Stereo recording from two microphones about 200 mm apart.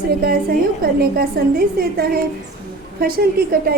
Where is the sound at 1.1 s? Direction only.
50° right (ahead or behind).